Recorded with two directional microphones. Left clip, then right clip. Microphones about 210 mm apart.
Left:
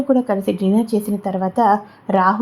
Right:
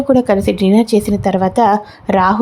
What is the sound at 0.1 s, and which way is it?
Speech, 20° right (ahead or behind).